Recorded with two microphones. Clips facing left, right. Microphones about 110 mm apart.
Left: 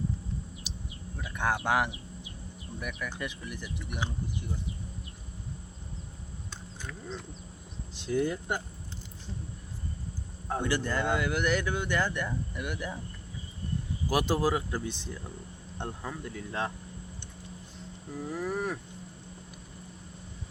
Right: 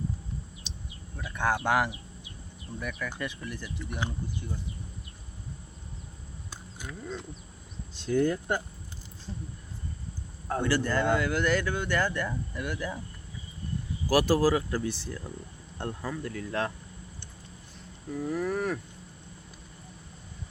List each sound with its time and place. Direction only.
0.7 s bird: 10° left (ahead or behind)
1.1 s a sound: 15° left (ahead or behind)
3.2 s speech: 15° left (ahead or behind)
7.9 s speech: 15° left (ahead or behind)
10.5 s speech: 15° left (ahead or behind)
14.1 s speech: 20° left (ahead or behind)
18.2 s speech: 15° left (ahead or behind)